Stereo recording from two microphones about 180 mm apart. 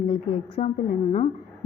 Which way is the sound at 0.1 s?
30° left (ahead or behind).